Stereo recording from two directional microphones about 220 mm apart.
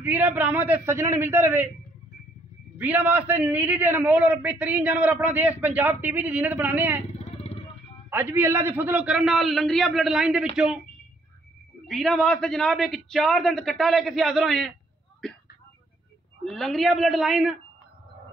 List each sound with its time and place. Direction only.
0.0 s a man's voice: 5° right (ahead or behind)
2.8 s a man's voice: 5° right (ahead or behind)
7.1 s vehicle: 25° left (ahead or behind)
8.1 s a man's voice: 10° right (ahead or behind)
11.9 s a man's voice: centre (ahead or behind)
16.4 s a man's voice: centre (ahead or behind)